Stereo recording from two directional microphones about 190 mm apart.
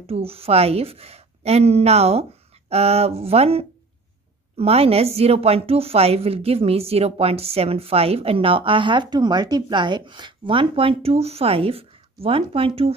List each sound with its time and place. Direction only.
0.0 s a woman's voice: 30° right (ahead or behind)